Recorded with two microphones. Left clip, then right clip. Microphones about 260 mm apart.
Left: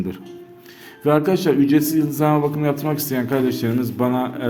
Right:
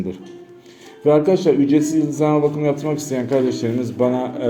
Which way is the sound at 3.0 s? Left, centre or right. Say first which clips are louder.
Right 1 dB; left.